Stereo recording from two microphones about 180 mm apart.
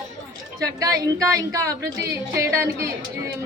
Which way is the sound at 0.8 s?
20° right (ahead or behind).